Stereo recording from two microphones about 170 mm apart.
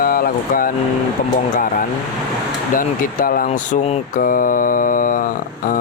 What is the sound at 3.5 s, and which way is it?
Speech, 40° left (ahead or behind).